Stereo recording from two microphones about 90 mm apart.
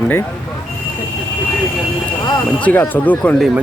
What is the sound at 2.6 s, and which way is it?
Speech, 15° left (ahead or behind).